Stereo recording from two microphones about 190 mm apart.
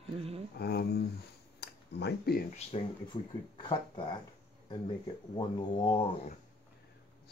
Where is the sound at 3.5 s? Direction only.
25° left (ahead or behind).